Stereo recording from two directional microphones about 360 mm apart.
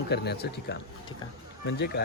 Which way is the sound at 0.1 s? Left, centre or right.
Left.